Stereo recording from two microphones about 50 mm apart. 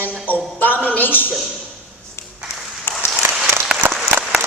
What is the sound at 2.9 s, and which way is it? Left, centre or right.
Applause, left.